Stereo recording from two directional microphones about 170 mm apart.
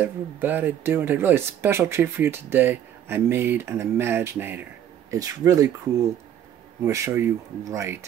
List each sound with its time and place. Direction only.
0.0 s speech: 10° right (ahead or behind)
6.8 s speech: 10° right (ahead or behind)